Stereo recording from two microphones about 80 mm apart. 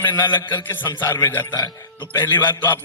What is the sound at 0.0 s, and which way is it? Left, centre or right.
A man's voice, left.